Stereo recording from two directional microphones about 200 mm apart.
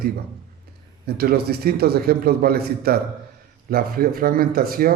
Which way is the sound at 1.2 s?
50° right (ahead or behind).